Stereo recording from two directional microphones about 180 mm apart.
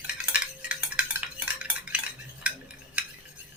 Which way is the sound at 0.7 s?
5° right (ahead or behind).